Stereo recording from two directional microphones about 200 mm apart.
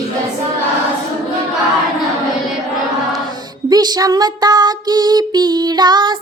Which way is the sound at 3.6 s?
20° right (ahead or behind).